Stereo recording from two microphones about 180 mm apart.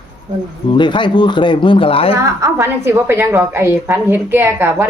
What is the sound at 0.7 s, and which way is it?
Speech, 25° left (ahead or behind).